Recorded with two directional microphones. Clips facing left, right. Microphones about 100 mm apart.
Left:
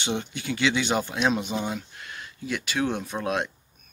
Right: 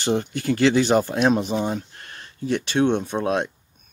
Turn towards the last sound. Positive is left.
turn(degrees=-25)  # may be behind; listen again after turning